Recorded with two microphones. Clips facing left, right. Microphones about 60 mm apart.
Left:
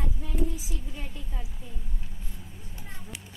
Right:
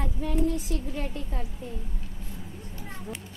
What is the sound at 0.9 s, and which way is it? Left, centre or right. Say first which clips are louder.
Speech: right 8 dB; right.